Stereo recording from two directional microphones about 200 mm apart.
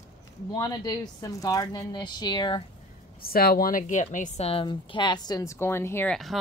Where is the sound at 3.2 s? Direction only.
50° left (ahead or behind); by 6.1 s 10° left (ahead or behind).